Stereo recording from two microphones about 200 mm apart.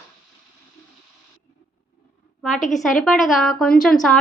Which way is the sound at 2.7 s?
Centre (ahead or behind).